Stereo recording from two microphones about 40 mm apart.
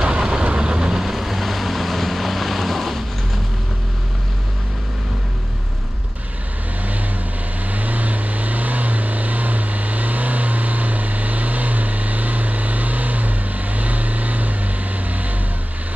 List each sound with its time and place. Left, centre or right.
0.0 s vehicle: centre
0.9 s vehicle: centre
7.6 s vehicle: right